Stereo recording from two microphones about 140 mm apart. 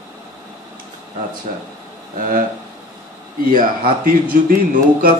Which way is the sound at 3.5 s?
85° right.